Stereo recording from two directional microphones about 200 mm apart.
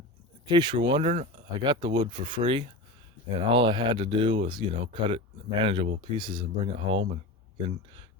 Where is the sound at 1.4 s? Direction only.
20° right (ahead or behind).